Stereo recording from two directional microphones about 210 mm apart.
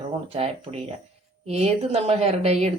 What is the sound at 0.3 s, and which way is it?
A woman's voice, 30° right (ahead or behind).